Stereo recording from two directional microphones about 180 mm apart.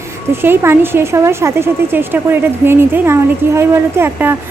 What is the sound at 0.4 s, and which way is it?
Speech, 10° right (ahead or behind).